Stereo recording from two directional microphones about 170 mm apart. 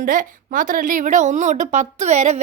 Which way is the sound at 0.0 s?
55° right (ahead or behind).